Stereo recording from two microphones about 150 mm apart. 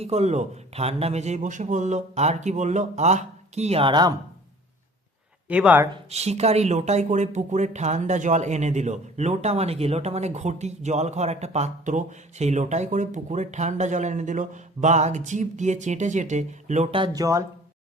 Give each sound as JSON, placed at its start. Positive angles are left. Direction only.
{"t": 0.0, "sound": "speech", "side_deg": -45}
{"t": 5.5, "sound": "speech", "side_deg": -10}
{"t": 5.9, "sound": "speech", "side_deg": -45}
{"t": 16.9, "sound": "speech", "side_deg": -30}